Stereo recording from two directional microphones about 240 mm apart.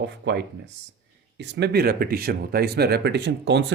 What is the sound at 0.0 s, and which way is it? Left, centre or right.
Speech, right.